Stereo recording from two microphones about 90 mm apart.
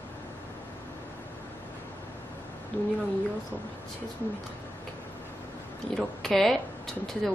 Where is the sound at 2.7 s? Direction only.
25° left (ahead or behind).